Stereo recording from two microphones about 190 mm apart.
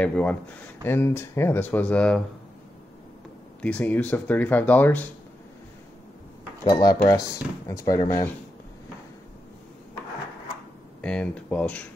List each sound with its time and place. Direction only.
0.0 s speech: 5° left (ahead or behind)
3.6 s speech: 10° left (ahead or behind)
6.6 s speech: 20° left (ahead or behind)
11.0 s speech: 5° left (ahead or behind)